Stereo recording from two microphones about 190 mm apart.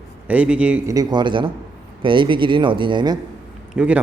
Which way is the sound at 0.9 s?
25° right (ahead or behind).